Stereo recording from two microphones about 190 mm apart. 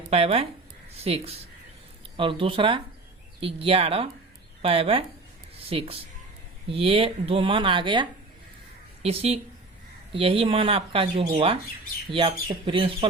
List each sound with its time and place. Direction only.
0.1 s speech: 30° right (ahead or behind)